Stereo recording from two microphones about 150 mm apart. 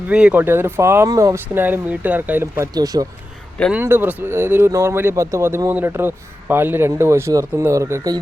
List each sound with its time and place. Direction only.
0.1 s speech: 5° right (ahead or behind)
2.7 s speech: 25° right (ahead or behind)
3.7 s speech: 15° right (ahead or behind)